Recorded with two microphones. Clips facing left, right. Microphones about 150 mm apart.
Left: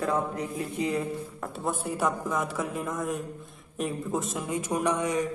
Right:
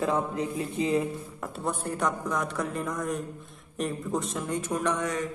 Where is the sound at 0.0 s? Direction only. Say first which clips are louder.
Right 1 dB; 25° right (ahead or behind).